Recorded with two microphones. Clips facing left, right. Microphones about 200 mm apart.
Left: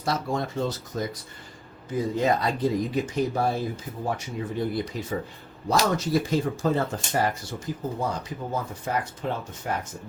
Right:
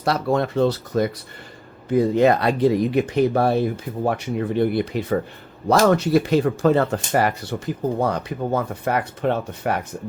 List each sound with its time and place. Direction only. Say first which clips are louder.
0.0 s speech: right 7 dB; 65° right (ahead or behind)